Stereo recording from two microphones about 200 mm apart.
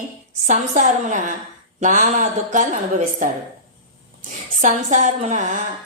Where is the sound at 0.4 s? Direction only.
40° right (ahead or behind).